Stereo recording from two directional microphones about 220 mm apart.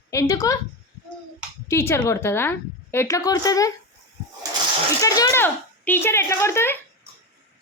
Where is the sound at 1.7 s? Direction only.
10° left (ahead or behind).